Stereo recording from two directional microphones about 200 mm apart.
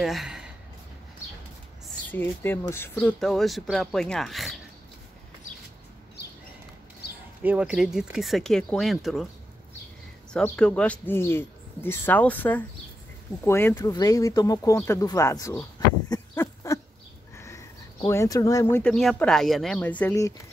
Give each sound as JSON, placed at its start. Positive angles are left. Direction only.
{"t": 0.0, "sound": "speech", "side_deg": 0}
{"t": 2.0, "sound": "speech", "side_deg": 10}
{"t": 7.4, "sound": "speech", "side_deg": -5}
{"t": 10.3, "sound": "speech", "side_deg": 5}
{"t": 16.1, "sound": "a sound", "side_deg": 15}
{"t": 18.0, "sound": "speech", "side_deg": 15}